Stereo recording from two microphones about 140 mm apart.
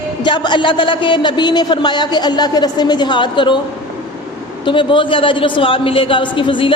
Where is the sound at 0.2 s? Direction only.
30° left (ahead or behind).